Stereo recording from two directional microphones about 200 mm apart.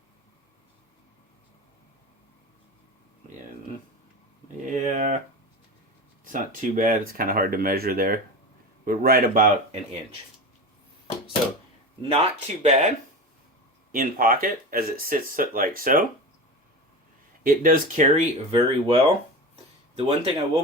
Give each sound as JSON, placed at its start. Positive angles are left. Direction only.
{"t": 4.6, "sound": "a sound", "side_deg": -40}
{"t": 6.2, "sound": "speech", "side_deg": -40}
{"t": 12.0, "sound": "speech", "side_deg": -30}
{"t": 13.9, "sound": "speech", "side_deg": -45}
{"t": 17.4, "sound": "speech", "side_deg": -45}
{"t": 20.0, "sound": "speech", "side_deg": -30}